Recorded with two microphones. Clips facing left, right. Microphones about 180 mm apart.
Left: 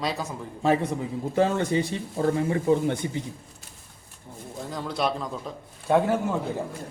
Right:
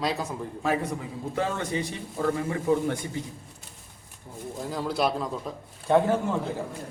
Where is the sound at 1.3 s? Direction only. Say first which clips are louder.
Left 6 dB; 30° left (ahead or behind).